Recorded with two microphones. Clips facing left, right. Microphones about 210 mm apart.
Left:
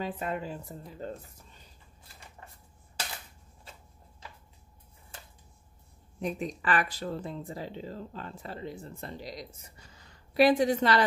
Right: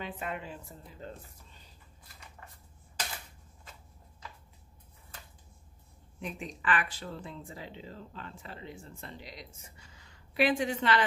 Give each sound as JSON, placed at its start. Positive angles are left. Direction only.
{"t": 0.0, "sound": "speech", "side_deg": 40}
{"t": 6.1, "sound": "speech", "side_deg": 40}